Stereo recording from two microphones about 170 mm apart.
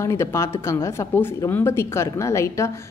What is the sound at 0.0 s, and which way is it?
A woman's voice, 15° left (ahead or behind).